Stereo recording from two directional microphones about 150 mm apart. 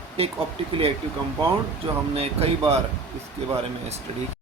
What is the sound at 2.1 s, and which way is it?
Speech, 40° right (ahead or behind).